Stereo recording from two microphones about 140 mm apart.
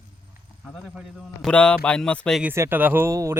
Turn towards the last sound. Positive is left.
turn(degrees=-20)  # may be behind; listen again after turning